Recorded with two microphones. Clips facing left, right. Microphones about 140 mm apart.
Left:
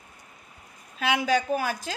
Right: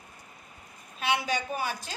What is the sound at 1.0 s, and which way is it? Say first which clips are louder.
Speech: left 5 dB; 90° left.